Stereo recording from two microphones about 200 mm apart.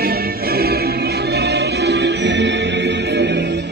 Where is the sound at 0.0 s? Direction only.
50° right (ahead or behind).